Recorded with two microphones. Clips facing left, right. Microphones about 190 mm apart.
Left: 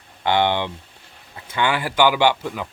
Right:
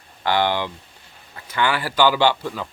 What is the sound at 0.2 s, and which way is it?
Speech, 20° left (ahead or behind).